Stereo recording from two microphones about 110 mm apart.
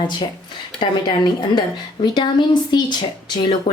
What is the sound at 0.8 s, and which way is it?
A woman's voice, 40° left (ahead or behind).